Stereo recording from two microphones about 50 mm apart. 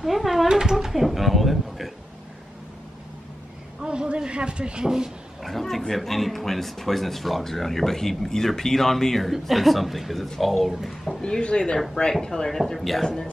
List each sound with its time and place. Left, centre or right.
0.0 s speech: centre
3.8 s a man's voice: centre
5.4 s speech: centre
11.1 s speech: centre